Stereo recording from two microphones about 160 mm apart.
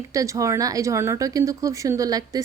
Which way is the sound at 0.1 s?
20° right (ahead or behind).